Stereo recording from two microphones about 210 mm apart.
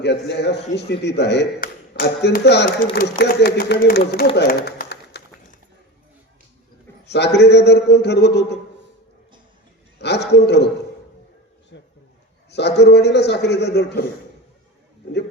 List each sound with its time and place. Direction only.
0.0 s speech: 55° left (ahead or behind)
4.4 s a sound: 50° left (ahead or behind)
7.1 s speech: 55° left (ahead or behind)
10.0 s speech: 55° left (ahead or behind)
11.7 s speech: 60° left (ahead or behind)